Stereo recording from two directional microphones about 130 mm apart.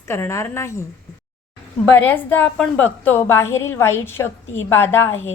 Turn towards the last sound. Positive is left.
turn(degrees=20)  # may be behind; listen again after turning